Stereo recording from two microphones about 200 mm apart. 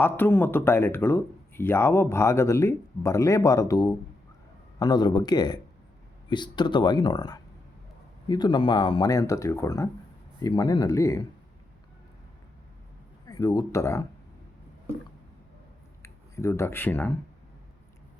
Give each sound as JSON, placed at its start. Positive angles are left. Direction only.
{"t": 0.0, "sound": "speech", "side_deg": 10}
{"t": 13.2, "sound": "speech", "side_deg": 20}
{"t": 16.0, "sound": "speech", "side_deg": 15}